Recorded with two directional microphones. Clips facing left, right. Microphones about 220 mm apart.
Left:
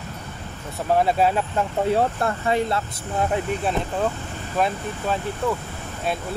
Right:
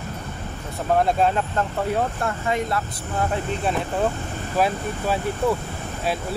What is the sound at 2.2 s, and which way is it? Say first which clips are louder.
Speech: left 2 dB; 35° left (ahead or behind).